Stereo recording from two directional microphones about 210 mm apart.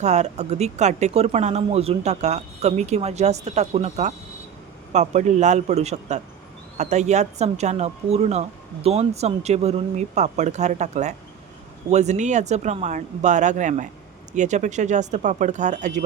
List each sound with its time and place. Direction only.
0.0 s speech: 35° right (ahead or behind)